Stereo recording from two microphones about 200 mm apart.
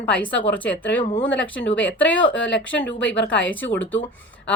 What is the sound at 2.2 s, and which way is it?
Speech, 65° left (ahead or behind).